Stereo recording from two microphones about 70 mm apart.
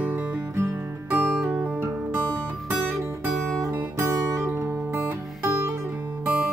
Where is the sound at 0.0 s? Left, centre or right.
Right.